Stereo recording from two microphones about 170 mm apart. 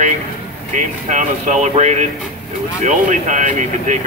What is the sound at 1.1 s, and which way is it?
Speech, 45° right (ahead or behind).